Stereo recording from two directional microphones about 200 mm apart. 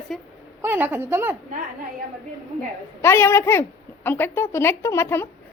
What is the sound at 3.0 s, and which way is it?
A woman's voice, 10° left (ahead or behind).